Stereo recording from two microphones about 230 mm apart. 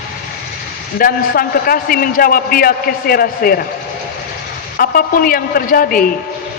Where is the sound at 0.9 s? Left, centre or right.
Left.